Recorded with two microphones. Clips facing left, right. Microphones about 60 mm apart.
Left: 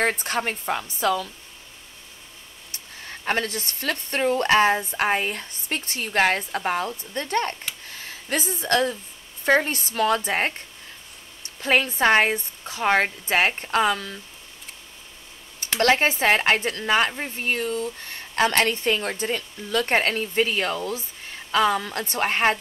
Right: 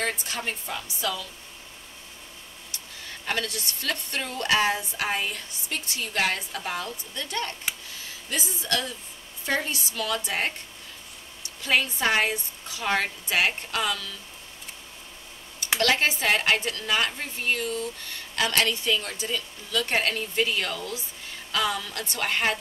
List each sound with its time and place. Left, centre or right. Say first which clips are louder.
0.0 s a woman's voice: left 6 dB; left
3.1 s a woman's voice: left 5 dB; left
15.8 s speech: left 5 dB; left